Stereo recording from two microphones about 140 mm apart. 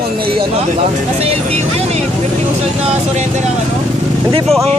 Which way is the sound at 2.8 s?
50° right (ahead or behind).